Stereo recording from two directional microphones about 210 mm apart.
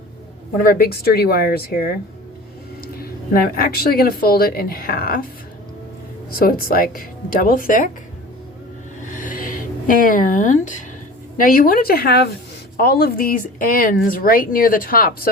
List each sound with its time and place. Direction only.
0.5 s speech: 45° left (ahead or behind)
6.3 s speech: 45° left (ahead or behind)
9.0 s music: 40° left (ahead or behind)
11.3 s speech: 40° left (ahead or behind)